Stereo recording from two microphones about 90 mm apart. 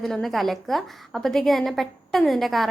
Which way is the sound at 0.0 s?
5° left (ahead or behind).